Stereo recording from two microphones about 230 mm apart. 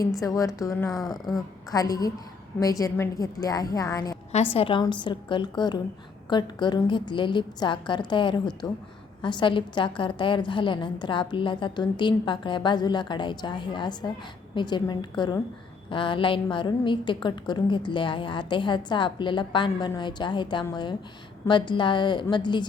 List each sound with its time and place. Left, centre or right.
0.2 s a woman's voice: centre
0.9 s speech: centre
1.7 s a woman's voice: centre